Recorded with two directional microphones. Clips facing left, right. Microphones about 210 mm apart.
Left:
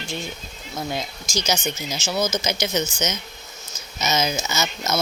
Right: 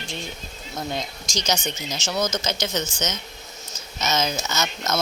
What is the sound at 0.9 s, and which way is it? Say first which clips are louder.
Speech: left 2 dB; 5° left (ahead or behind).